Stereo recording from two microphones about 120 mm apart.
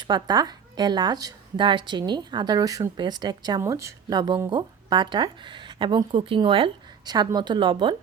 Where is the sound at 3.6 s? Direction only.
25° right (ahead or behind); by 7.9 s 45° right (ahead or behind).